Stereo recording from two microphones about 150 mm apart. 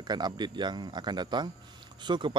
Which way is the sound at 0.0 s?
30° right (ahead or behind).